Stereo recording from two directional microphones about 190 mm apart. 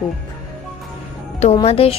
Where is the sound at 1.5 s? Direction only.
30° left (ahead or behind).